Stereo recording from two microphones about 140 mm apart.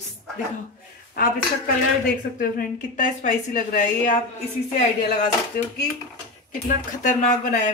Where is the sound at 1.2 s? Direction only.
90° left.